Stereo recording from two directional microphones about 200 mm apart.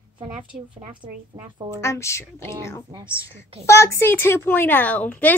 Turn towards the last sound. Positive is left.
turn(degrees=10)  # may be behind; listen again after turning